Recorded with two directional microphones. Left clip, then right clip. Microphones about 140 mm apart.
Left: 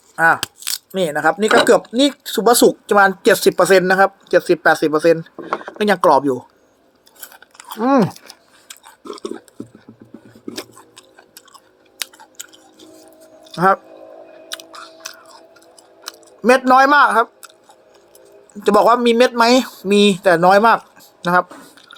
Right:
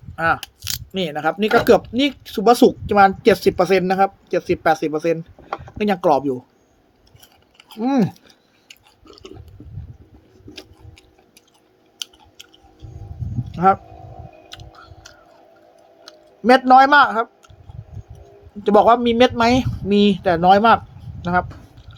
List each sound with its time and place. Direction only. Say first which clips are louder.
0.9 s speech: left 5 dB; 5° right (ahead or behind)
7.9 s speech: left 5 dB; 45° right (ahead or behind)
9.0 s chewing: left 12 dB; 10° right (ahead or behind)
14.7 s chewing: left 9 dB; 10° left (ahead or behind)
16.6 s a man's voice: right 1 dB; 5° left (ahead or behind)
18.6 s speech: left 1 dB; centre (ahead or behind)
21.2 s a sound: left 5 dB; 5° left (ahead or behind)